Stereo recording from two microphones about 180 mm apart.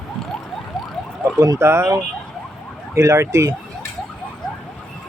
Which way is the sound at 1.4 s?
15° right (ahead or behind).